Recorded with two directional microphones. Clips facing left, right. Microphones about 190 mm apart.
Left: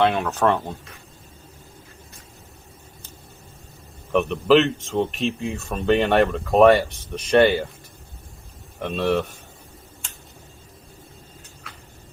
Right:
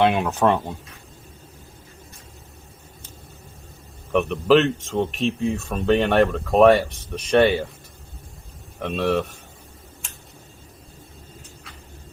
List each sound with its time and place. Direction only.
0.0 s speech: 15° right (ahead or behind)
4.1 s speech: centre (ahead or behind)
8.8 s speech: centre (ahead or behind)